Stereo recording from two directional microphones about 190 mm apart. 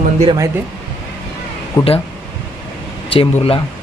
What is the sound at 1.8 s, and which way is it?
Speech, 15° left (ahead or behind).